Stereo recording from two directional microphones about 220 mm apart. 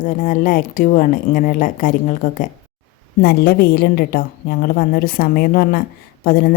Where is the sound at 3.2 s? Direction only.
45° left (ahead or behind).